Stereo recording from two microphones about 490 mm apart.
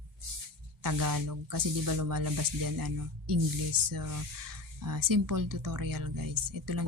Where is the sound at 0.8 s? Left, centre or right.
Right.